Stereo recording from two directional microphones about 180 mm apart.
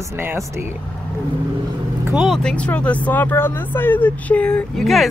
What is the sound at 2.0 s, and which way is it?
Speech, 5° right (ahead or behind).